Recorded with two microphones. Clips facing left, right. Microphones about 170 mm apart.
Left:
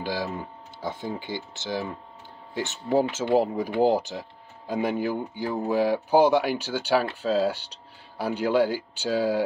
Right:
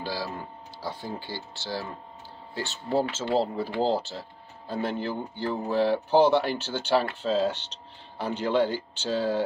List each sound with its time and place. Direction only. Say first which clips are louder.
0.0 s speech: left 3 dB; 20° left (ahead or behind)